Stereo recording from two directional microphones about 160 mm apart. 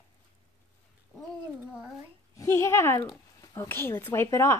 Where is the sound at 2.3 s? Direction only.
20° left (ahead or behind).